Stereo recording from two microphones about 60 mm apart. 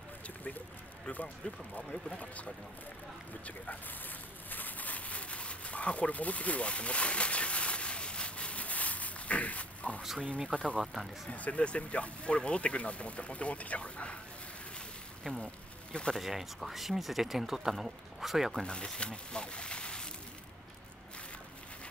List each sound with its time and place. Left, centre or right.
0.4 s a sound: left
1.8 s speech: centre
4.5 s a sound: left
10.5 s speech: centre
10.8 s speech: centre
11.2 s speech: left
15.2 s speech: centre
16.2 s speech: centre
18.6 s speech: centre